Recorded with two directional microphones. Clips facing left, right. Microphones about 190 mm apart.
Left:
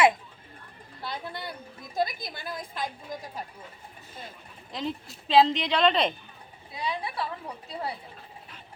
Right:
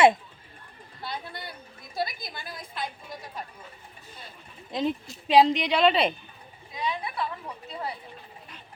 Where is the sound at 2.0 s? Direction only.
50° left (ahead or behind).